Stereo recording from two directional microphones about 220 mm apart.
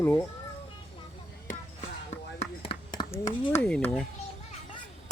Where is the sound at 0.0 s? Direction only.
10° left (ahead or behind).